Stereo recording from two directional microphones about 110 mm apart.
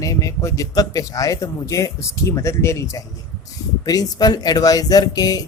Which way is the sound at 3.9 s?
35° left (ahead or behind).